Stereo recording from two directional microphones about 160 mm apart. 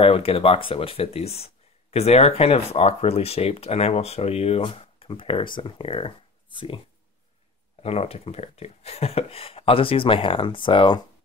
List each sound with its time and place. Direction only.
0.0 s speech: 35° left (ahead or behind)
7.8 s speech: 40° left (ahead or behind)